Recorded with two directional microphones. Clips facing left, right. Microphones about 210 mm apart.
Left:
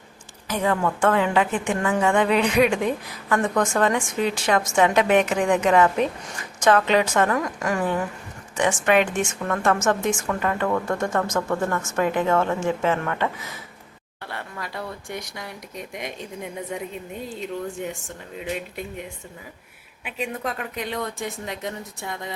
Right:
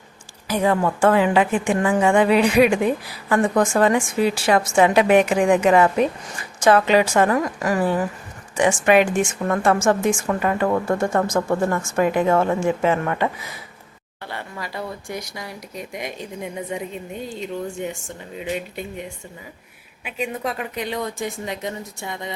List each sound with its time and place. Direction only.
0.4 s a woman's voice: 10° right (ahead or behind)
14.3 s speech: centre (ahead or behind)
20.1 s speech: centre (ahead or behind)